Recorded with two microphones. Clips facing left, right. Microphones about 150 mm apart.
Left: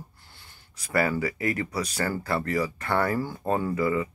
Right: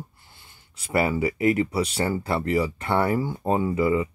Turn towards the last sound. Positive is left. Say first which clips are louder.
# right 3 dB
turn(degrees=-20)  # may be behind; listen again after turning